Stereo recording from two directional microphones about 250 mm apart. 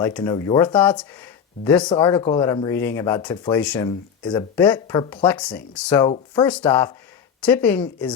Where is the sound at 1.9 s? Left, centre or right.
Centre.